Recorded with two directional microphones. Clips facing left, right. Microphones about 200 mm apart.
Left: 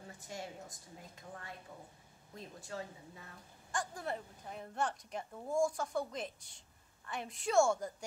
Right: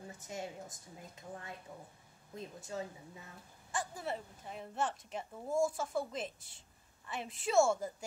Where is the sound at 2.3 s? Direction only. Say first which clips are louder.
Right 3 dB; 20° right (ahead or behind).